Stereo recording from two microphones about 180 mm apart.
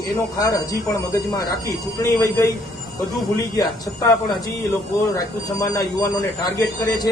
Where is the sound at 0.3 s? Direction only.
20° left (ahead or behind).